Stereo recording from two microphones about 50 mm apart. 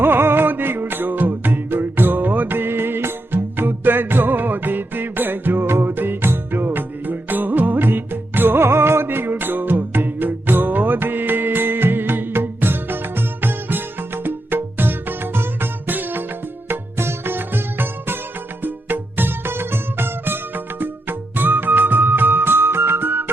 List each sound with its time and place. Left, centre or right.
0.0 s music: right
16.6 s music: right